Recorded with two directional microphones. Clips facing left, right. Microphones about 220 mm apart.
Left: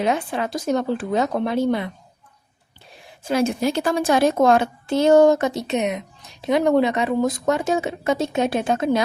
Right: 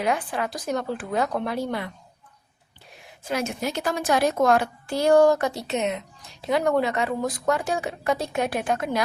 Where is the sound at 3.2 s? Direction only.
30° left (ahead or behind).